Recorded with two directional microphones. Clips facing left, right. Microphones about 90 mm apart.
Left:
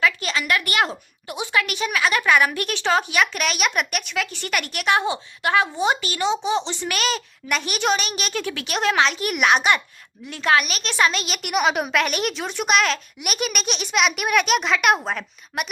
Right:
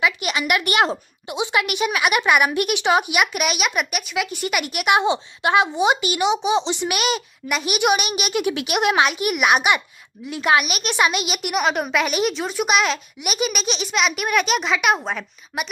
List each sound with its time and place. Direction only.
0.0 s a woman's voice: 15° right (ahead or behind)